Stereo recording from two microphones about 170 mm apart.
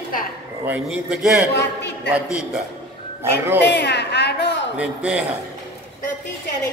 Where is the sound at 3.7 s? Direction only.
80° left.